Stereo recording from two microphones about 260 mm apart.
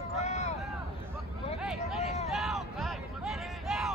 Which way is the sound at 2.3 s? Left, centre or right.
Centre.